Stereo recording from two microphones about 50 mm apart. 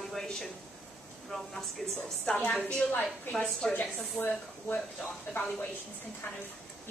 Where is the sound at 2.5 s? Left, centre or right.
Centre.